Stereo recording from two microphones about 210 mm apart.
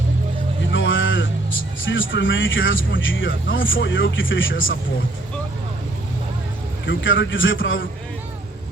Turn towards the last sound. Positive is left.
turn(degrees=65)  # may be behind; listen again after turning